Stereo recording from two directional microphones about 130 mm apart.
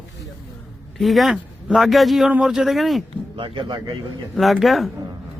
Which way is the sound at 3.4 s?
40° right (ahead or behind).